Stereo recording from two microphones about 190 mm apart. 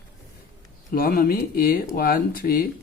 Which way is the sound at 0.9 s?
50° left (ahead or behind).